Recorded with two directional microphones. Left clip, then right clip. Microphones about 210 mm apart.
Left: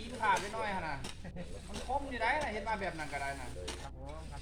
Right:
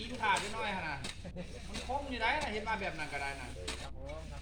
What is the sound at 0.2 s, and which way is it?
Speech, 20° left (ahead or behind).